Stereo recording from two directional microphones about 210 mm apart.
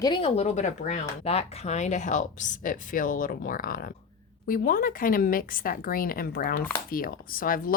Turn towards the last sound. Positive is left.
turn(degrees=40)  # may be behind; listen again after turning